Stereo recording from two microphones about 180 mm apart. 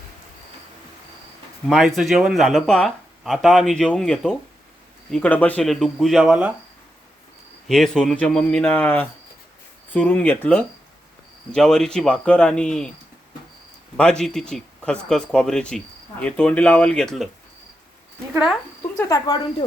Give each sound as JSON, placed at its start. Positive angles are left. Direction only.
{"t": 1.6, "sound": "speech", "side_deg": 0}
{"t": 7.7, "sound": "speech", "side_deg": 0}
{"t": 13.9, "sound": "speech", "side_deg": 5}
{"t": 18.9, "sound": "speech", "side_deg": 20}